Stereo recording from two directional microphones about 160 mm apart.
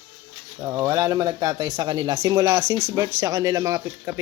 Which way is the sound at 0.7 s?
20° right (ahead or behind).